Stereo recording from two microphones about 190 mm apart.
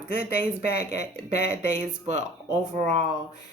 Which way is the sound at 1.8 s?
40° right (ahead or behind).